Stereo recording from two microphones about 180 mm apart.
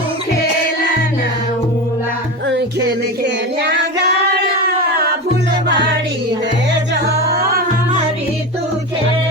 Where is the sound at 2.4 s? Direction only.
75° right (ahead or behind).